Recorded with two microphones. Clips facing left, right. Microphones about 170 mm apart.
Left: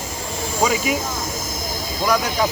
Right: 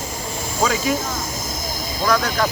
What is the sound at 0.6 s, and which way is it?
Speech, 10° left (ahead or behind).